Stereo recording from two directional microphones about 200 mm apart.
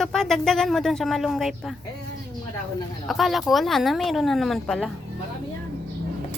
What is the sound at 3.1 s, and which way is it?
Speech, centre (ahead or behind).